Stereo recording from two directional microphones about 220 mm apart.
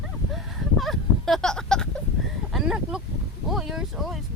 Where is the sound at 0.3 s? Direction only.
Centre (ahead or behind).